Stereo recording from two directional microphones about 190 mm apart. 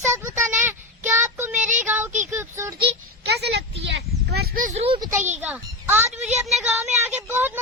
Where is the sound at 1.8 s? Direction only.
10° right (ahead or behind).